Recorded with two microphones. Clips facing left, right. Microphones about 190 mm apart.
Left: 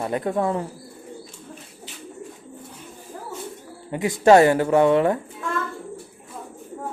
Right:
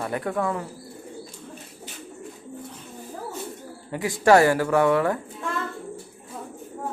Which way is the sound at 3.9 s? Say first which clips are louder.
Left 3 dB; 20° left (ahead or behind).